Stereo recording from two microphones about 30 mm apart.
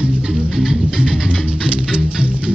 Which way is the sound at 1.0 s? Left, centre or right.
Right.